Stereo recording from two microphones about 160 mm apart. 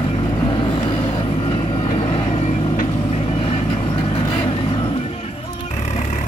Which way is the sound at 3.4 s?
35° left (ahead or behind).